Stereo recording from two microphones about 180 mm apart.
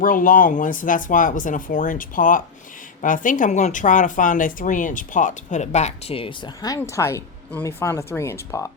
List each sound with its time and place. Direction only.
0.0 s speech: 50° left (ahead or behind); by 8.6 s 15° left (ahead or behind)